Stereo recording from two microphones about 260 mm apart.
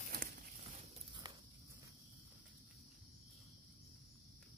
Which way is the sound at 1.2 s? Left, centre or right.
Centre.